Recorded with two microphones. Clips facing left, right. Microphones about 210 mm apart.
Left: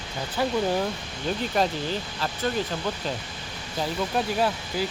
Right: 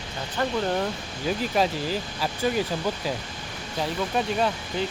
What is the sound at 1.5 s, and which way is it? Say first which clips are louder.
Speech: even; 5° right (ahead or behind).